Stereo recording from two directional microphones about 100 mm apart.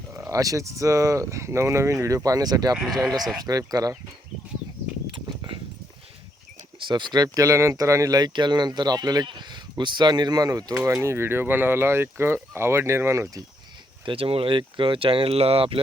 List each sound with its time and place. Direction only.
0.1 s speech: 30° right (ahead or behind)
2.7 s speech: centre (ahead or behind)
3.0 s speech: 40° right (ahead or behind)
5.1 s dog: 40° right (ahead or behind)
6.7 s speech: 50° right (ahead or behind)
10.8 s speech: 25° right (ahead or behind)
14.0 s speech: 65° right (ahead or behind)